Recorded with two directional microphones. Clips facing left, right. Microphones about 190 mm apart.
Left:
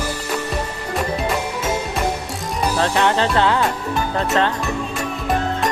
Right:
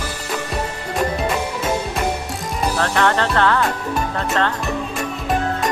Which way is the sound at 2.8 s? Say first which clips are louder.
Left 1 dB; 15° left (ahead or behind).